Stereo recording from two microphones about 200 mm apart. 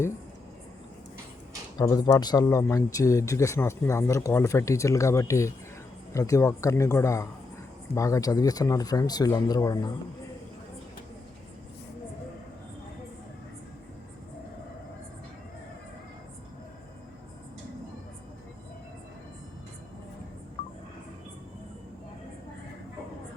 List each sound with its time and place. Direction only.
1.8 s speech: 20° left (ahead or behind)